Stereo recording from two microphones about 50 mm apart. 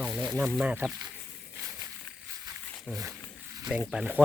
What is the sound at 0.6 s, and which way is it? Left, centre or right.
Speech, right.